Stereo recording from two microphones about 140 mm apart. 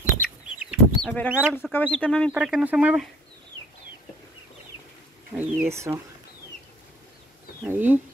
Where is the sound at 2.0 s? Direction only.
5° left (ahead or behind).